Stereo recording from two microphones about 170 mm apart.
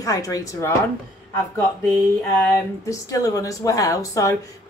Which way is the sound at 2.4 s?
20° left (ahead or behind).